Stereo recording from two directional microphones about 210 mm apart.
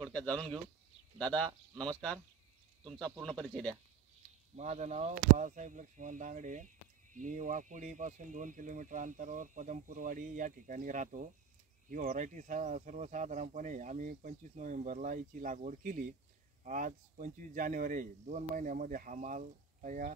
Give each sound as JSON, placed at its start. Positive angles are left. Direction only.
{"t": 0.0, "sound": "speech", "side_deg": 5}
{"t": 3.4, "sound": "speech", "side_deg": 5}
{"t": 4.6, "sound": "speech", "side_deg": -35}